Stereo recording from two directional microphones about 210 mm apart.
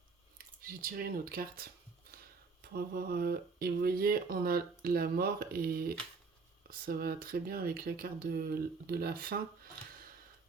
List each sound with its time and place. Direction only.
0.3 s speech: 45° right (ahead or behind)
2.7 s speech: 45° right (ahead or behind)